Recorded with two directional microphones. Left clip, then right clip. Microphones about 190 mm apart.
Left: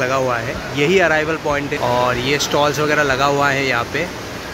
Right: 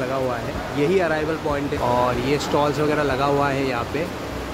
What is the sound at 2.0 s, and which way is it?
Speech, centre (ahead or behind).